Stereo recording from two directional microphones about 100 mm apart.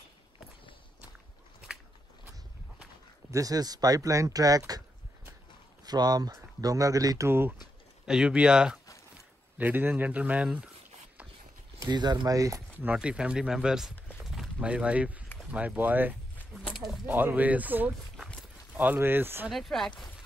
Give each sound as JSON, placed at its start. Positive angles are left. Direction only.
{"t": 3.3, "sound": "speech", "side_deg": -35}
{"t": 5.9, "sound": "speech", "side_deg": -40}
{"t": 7.2, "sound": "speech", "side_deg": -20}
{"t": 8.0, "sound": "speech", "side_deg": -5}
{"t": 9.6, "sound": "speech", "side_deg": -20}
{"t": 11.9, "sound": "speech", "side_deg": -45}
{"t": 12.7, "sound": "speech", "side_deg": -15}
{"t": 14.2, "sound": "a sound", "side_deg": -5}
{"t": 15.5, "sound": "speech", "side_deg": -15}
{"t": 16.7, "sound": "a sound", "side_deg": 0}
{"t": 17.0, "sound": "speech", "side_deg": -20}
{"t": 19.5, "sound": "speech", "side_deg": 0}